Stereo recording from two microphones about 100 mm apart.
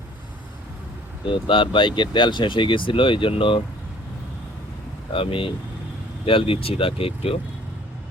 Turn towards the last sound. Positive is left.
turn(degrees=75)  # may be behind; listen again after turning